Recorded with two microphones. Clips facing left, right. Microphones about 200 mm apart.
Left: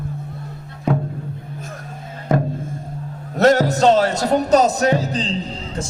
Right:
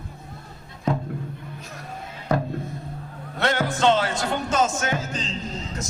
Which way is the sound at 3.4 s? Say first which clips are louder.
Left 9 dB; 40° left (ahead or behind).